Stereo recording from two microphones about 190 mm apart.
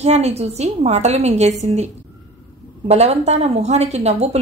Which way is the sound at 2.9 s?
35° right (ahead or behind).